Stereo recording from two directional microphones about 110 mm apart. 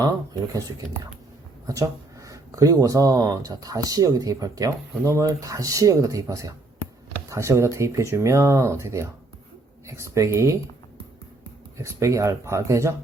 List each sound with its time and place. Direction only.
1.6 s speech: 30° right (ahead or behind)
11.8 s speech: 25° right (ahead or behind)